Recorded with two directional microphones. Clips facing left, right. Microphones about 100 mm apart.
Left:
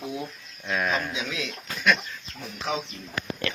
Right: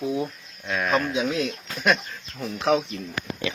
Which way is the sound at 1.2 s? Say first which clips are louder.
Right 8 dB; 45° right (ahead or behind).